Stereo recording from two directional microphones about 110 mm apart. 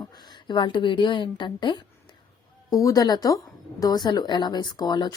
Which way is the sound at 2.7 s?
35° left (ahead or behind).